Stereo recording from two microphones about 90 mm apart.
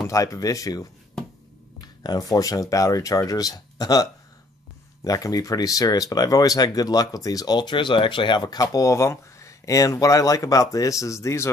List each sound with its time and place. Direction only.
0.0 s speech: 40° left (ahead or behind)